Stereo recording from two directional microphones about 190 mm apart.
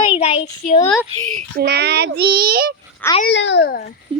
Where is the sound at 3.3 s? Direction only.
70° left (ahead or behind).